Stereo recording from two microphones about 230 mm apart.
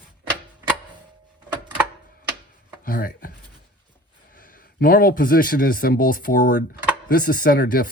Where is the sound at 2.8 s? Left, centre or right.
Left.